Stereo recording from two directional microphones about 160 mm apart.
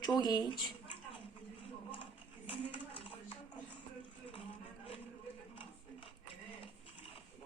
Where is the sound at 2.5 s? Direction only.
30° left (ahead or behind).